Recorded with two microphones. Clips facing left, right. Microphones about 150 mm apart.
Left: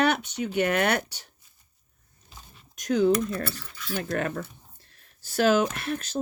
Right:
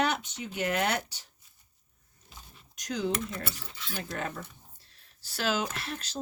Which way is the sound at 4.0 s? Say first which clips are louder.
Left 7 dB; 65° left (ahead or behind).